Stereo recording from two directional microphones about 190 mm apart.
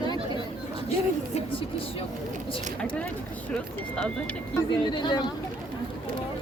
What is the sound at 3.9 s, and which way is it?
Speech, 5° left (ahead or behind).